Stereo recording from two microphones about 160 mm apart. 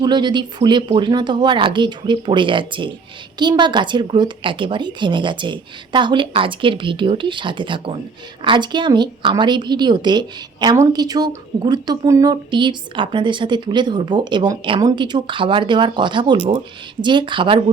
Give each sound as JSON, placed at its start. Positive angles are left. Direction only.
{"t": 0.0, "sound": "a woman's voice", "side_deg": -25}